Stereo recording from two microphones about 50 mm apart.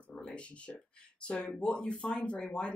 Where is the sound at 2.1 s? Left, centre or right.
Left.